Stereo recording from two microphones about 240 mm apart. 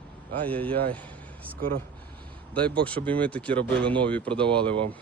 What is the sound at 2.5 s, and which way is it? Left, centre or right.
Speech, centre.